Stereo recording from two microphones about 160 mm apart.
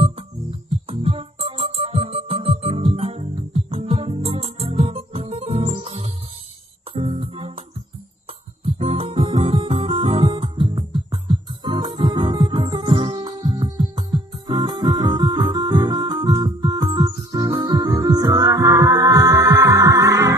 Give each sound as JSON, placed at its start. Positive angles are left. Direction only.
{"t": 0.8, "sound": "music", "side_deg": -35}
{"t": 8.6, "sound": "music", "side_deg": -35}